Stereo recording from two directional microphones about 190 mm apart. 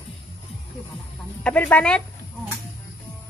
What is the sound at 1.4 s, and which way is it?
Speech, 5° left (ahead or behind).